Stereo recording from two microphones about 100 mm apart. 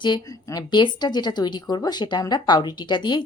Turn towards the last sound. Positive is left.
turn(degrees=50)  # may be behind; listen again after turning